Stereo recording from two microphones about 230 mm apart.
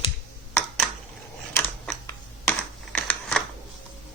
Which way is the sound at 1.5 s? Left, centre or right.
Centre.